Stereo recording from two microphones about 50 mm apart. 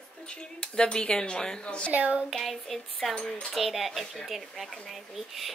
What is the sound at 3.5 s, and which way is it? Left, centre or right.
A child's voice, centre.